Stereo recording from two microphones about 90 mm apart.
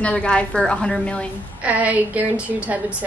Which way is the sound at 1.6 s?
15° right (ahead or behind).